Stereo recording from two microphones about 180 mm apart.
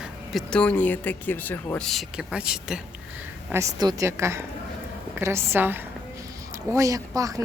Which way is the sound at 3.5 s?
20° right (ahead or behind).